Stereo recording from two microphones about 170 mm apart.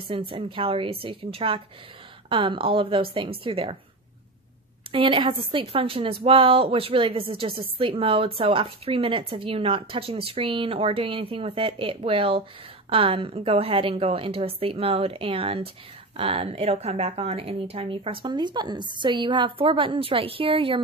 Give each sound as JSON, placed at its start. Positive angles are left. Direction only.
{"t": 0.3, "sound": "a woman's voice", "side_deg": -30}
{"t": 4.9, "sound": "a woman's voice", "side_deg": -30}